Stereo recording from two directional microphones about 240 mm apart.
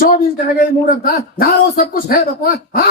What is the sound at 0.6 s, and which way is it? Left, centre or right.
A man's voice, left.